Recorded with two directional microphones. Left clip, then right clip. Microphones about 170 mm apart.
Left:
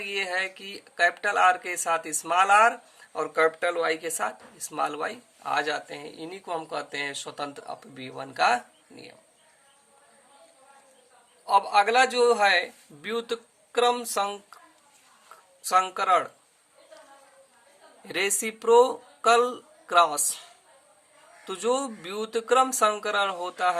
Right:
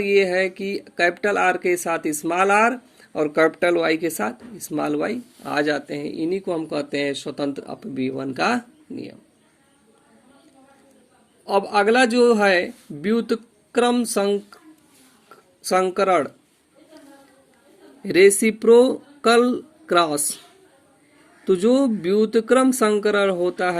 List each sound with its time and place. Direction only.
0.0 s speech: 15° right (ahead or behind)
11.4 s speech: 15° right (ahead or behind)
15.6 s speech: 15° right (ahead or behind)
18.0 s speech: 15° right (ahead or behind)
21.4 s speech: 15° right (ahead or behind)